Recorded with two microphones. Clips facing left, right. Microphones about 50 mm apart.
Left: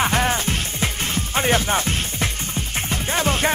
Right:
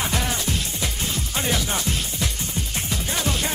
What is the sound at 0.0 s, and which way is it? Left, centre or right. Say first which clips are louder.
Music: left 6 dB; left.